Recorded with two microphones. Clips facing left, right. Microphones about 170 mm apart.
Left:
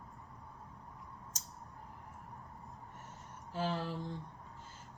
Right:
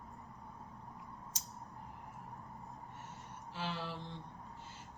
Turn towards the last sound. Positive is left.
turn(degrees=45)  # may be behind; listen again after turning